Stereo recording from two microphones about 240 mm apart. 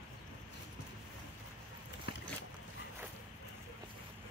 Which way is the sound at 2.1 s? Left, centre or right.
Left.